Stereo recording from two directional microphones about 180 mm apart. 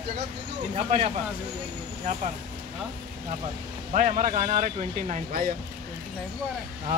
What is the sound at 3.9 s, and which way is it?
Speech, 45° right (ahead or behind).